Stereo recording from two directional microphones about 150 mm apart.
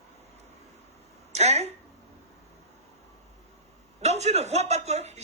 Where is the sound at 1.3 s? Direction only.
45° right (ahead or behind).